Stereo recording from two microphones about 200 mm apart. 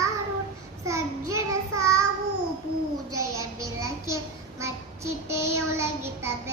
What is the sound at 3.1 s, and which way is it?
Child singing, 15° right (ahead or behind).